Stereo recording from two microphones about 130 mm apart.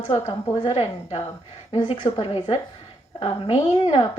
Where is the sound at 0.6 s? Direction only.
50° left (ahead or behind).